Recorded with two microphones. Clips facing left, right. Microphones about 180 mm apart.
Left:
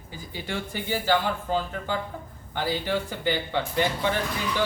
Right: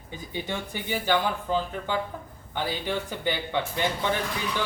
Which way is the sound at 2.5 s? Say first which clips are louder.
Left 2 dB; 15° right (ahead or behind).